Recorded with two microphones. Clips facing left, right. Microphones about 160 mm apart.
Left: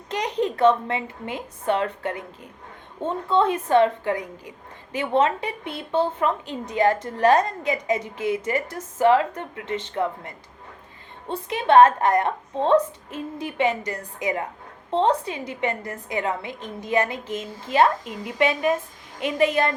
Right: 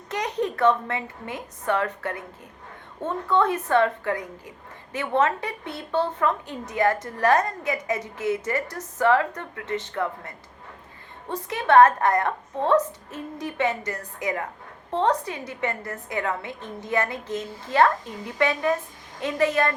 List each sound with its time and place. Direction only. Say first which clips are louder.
0.1 s a woman's voice: left 2 dB; 15° left (ahead or behind)
11.4 s a woman's voice: left 1 dB; 15° left (ahead or behind)